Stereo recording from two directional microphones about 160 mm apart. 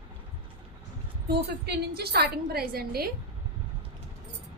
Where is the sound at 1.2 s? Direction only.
85° right.